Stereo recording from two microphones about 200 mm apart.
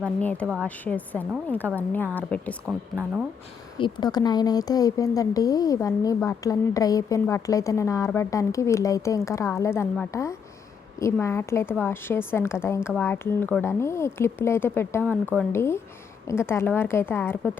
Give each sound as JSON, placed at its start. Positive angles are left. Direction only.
{"t": 0.0, "sound": "speech", "side_deg": 5}
{"t": 3.8, "sound": "speech", "side_deg": 20}